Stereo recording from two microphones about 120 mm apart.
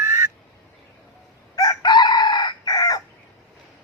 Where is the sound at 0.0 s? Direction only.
20° right (ahead or behind).